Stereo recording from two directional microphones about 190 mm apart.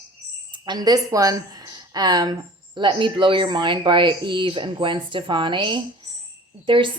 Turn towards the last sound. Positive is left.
turn(degrees=-25)  # may be behind; listen again after turning